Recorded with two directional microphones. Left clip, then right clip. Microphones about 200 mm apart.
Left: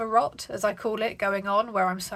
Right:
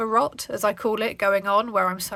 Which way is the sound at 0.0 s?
40° right (ahead or behind).